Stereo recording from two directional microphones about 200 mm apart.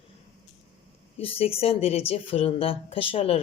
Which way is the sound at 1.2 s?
30° left (ahead or behind).